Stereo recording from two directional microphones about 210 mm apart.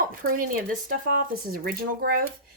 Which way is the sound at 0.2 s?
40° right (ahead or behind).